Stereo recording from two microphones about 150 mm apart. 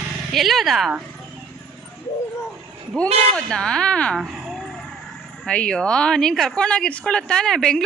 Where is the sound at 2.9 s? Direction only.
5° left (ahead or behind).